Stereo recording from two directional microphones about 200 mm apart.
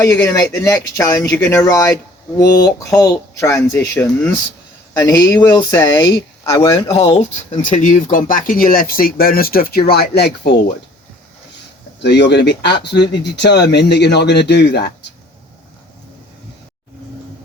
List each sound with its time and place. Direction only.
0.0 s speech: 15° left (ahead or behind)
7.6 s speech: 40° left (ahead or behind); by 10.6 s 55° left (ahead or behind)
12.0 s speech: 60° left (ahead or behind)